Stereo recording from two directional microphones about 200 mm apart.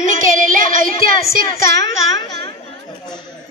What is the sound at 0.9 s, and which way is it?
Child singing, 30° left (ahead or behind).